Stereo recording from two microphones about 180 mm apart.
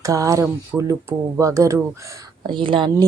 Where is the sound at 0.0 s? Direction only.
20° right (ahead or behind).